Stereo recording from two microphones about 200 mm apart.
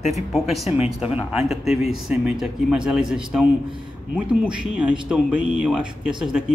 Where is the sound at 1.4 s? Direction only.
30° left (ahead or behind).